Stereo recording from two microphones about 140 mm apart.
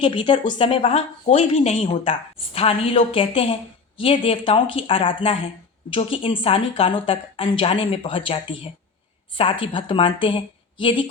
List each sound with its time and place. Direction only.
0.0 s speech: 35° left (ahead or behind)